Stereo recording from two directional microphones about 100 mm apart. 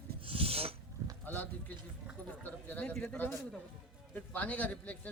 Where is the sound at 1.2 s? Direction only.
20° left (ahead or behind).